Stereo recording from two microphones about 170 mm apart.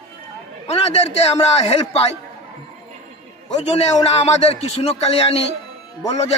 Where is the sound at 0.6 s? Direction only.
35° left (ahead or behind).